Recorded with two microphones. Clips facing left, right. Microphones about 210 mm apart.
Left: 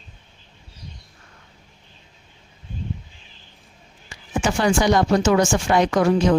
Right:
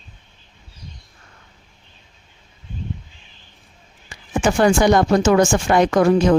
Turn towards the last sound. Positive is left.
turn(degrees=-50)  # may be behind; listen again after turning